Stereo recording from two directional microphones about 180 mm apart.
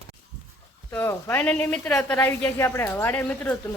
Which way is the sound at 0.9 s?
15° left (ahead or behind).